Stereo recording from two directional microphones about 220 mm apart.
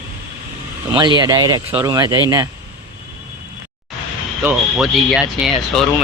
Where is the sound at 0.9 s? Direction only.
20° right (ahead or behind).